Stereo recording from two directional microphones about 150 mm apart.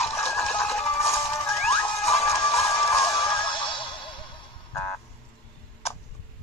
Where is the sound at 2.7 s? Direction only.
20° left (ahead or behind).